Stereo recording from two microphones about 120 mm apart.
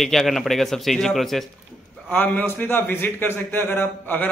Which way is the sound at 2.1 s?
15° left (ahead or behind).